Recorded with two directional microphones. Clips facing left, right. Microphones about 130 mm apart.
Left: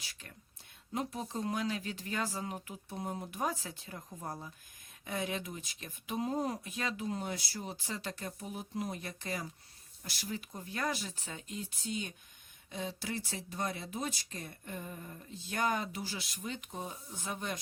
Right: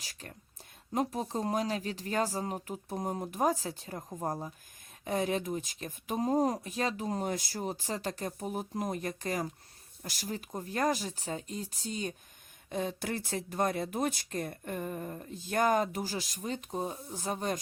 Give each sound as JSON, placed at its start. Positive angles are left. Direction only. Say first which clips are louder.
{"t": 0.0, "sound": "speech", "louder": "right 5 dB", "side_deg": -40}
{"t": 12.7, "sound": "speech", "louder": "right 5 dB", "side_deg": -50}